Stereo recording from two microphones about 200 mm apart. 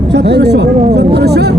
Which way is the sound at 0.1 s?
55° right (ahead or behind).